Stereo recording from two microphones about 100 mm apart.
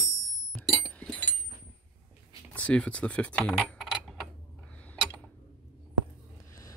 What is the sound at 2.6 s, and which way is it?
Speech, 10° left (ahead or behind).